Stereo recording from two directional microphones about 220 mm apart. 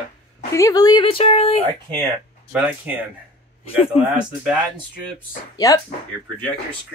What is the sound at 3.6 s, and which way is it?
Speech, 25° left (ahead or behind).